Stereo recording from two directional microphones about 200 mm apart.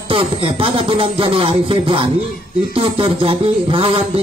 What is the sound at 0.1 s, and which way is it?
Speech, 25° right (ahead or behind).